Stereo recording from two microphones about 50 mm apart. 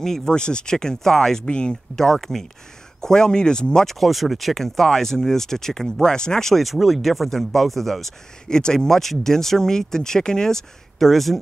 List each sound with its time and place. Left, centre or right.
0.0 s speech: centre